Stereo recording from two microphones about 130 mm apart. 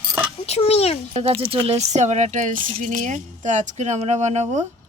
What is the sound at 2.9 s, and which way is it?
Speech, 70° right (ahead or behind).